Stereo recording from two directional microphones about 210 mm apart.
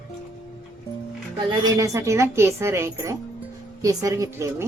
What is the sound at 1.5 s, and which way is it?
A woman's voice, 15° right (ahead or behind).